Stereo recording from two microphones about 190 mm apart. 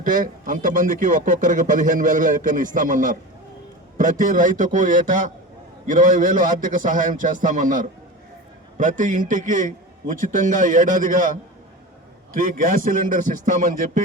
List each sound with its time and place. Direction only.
0.0 s speech: 45° right (ahead or behind)
12.4 s speech: 45° right (ahead or behind)